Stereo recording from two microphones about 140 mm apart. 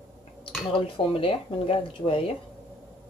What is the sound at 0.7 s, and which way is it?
Speech, 40° left (ahead or behind).